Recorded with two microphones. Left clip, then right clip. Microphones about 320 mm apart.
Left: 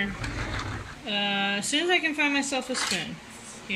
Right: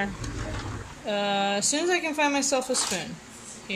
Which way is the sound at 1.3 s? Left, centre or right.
Centre.